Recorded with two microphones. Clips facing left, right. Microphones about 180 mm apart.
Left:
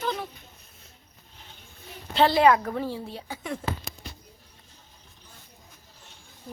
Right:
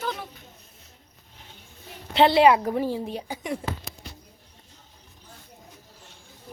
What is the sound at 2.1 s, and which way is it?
A woman's voice, 20° right (ahead or behind).